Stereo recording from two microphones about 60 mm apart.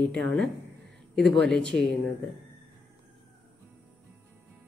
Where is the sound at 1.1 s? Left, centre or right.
Centre.